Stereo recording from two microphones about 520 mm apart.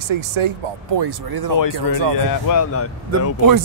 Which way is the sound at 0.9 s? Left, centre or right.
Right.